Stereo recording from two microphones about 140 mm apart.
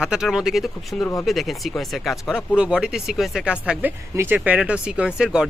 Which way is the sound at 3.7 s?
10° right (ahead or behind).